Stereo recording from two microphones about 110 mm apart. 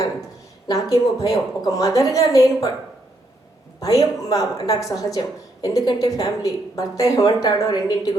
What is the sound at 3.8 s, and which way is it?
A woman's voice, 30° left (ahead or behind).